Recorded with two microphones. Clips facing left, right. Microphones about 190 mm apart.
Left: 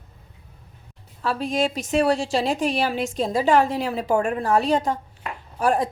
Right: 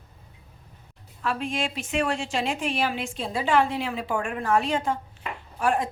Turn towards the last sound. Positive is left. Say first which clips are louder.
# left 3 dB
turn(degrees=35)  # may be behind; listen again after turning